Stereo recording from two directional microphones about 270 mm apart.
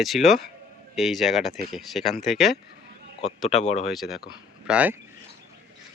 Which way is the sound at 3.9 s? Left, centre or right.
Centre.